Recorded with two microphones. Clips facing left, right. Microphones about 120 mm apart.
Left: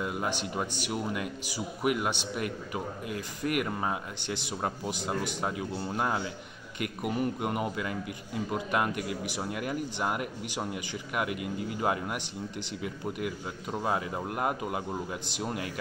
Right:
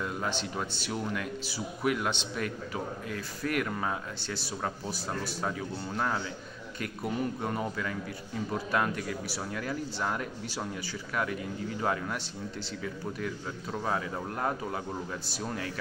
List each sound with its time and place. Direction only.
0.0 s speech: 10° left (ahead or behind)